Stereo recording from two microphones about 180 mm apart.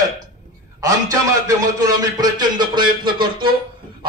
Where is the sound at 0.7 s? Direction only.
20° right (ahead or behind).